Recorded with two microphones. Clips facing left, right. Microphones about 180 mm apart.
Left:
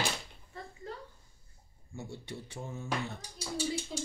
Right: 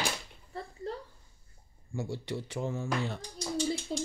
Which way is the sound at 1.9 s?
90° right.